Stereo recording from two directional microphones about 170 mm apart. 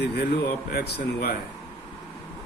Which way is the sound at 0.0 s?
70° left (ahead or behind).